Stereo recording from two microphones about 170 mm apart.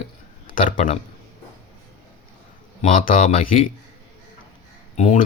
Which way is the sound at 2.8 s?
50° left (ahead or behind).